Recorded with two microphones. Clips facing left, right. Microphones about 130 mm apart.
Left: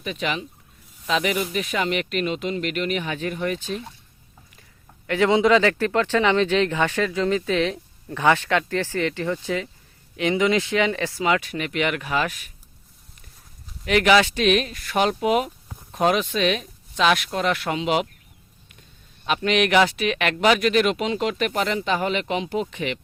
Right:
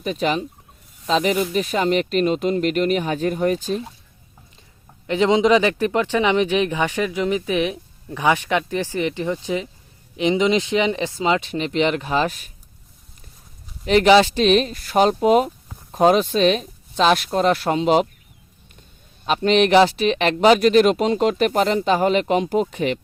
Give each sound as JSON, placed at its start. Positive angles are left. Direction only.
{"t": 0.0, "sound": "speech", "side_deg": -35}
{"t": 5.0, "sound": "speech", "side_deg": -20}
{"t": 13.8, "sound": "speech", "side_deg": -30}
{"t": 19.2, "sound": "speech", "side_deg": -30}